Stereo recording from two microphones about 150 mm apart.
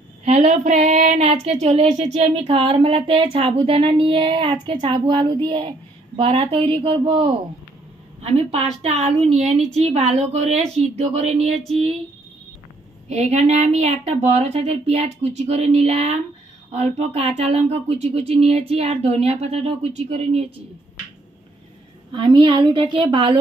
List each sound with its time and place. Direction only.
0.2 s speech: 45° right (ahead or behind)
13.1 s speech: 45° right (ahead or behind)
22.1 s speech: 30° right (ahead or behind)